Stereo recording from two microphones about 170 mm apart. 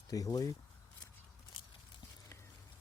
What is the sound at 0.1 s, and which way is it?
Speech, 20° left (ahead or behind).